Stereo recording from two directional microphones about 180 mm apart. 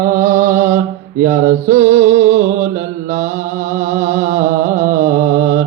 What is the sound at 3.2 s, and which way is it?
Music, 15° right (ahead or behind).